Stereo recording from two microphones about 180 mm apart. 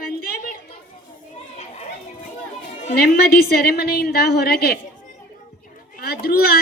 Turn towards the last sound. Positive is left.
turn(degrees=60)  # may be behind; listen again after turning